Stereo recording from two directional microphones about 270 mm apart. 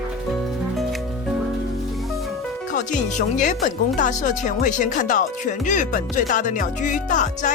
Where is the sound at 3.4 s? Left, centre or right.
Left.